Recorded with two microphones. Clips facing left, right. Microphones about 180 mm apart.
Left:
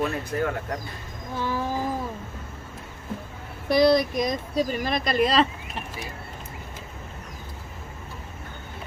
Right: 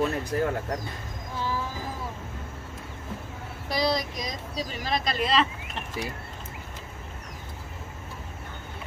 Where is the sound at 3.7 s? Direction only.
55° left (ahead or behind).